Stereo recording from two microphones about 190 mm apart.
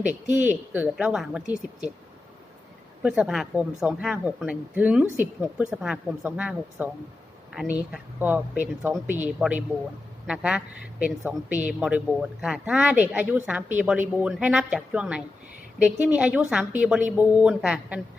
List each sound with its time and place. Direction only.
0.1 s speech: 10° right (ahead or behind)
3.0 s speech: 5° right (ahead or behind)
7.9 s a woman's voice: 5° right (ahead or behind)